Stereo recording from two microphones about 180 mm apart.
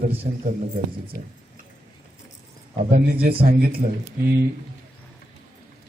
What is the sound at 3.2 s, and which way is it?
Speech, 55° right (ahead or behind).